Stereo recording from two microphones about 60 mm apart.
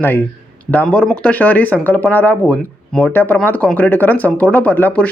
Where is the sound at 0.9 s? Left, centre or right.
Centre.